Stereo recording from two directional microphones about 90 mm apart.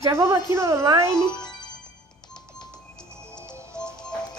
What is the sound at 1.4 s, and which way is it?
Music, 50° left (ahead or behind).